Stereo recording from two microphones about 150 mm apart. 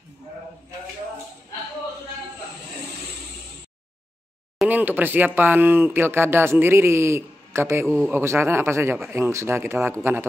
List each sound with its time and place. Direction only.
4.6 s speech: 10° right (ahead or behind)